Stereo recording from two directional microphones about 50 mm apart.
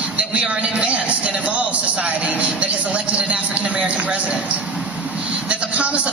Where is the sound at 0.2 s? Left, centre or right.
Right.